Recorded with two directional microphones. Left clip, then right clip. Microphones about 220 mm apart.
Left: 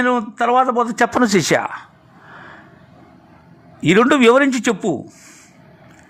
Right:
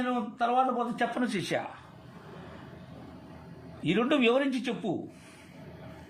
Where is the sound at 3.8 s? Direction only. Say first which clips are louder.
Left 14 dB; 40° left (ahead or behind).